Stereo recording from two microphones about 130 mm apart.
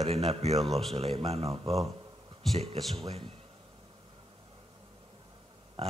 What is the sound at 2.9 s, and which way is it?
Speech, 45° right (ahead or behind).